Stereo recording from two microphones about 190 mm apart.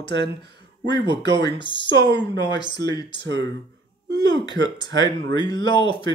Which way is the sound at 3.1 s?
70° right (ahead or behind).